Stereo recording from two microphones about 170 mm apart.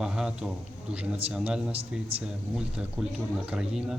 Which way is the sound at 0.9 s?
5° right (ahead or behind).